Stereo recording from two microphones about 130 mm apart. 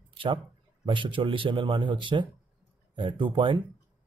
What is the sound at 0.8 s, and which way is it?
Speech, 40° right (ahead or behind).